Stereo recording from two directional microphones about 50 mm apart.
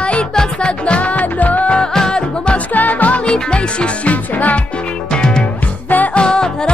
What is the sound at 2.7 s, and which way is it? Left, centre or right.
Music, left.